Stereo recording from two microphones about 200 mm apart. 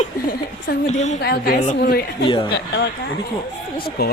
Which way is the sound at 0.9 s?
35° left (ahead or behind).